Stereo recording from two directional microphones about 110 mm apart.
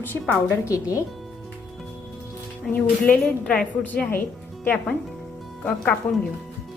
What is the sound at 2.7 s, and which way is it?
A woman's voice, 10° left (ahead or behind).